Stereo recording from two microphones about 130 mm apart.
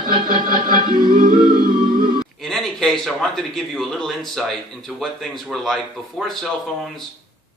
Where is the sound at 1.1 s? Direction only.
90° right.